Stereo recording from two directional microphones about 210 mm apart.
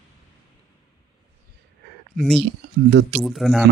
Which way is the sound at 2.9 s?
55° right (ahead or behind).